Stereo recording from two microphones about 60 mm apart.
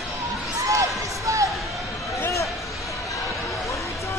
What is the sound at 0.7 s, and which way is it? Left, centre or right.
Slam, right.